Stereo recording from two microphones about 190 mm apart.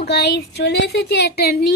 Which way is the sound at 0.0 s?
60° left (ahead or behind).